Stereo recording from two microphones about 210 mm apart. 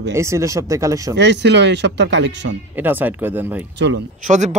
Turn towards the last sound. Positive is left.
turn(degrees=-35)  # may be behind; listen again after turning